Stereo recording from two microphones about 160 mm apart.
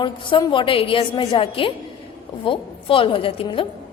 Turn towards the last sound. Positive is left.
turn(degrees=35)  # may be behind; listen again after turning